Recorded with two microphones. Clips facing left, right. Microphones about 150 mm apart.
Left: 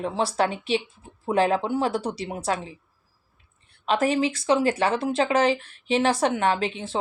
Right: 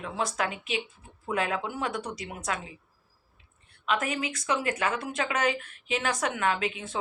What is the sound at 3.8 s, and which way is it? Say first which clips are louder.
Speech: left 7 dB; 30° left (ahead or behind).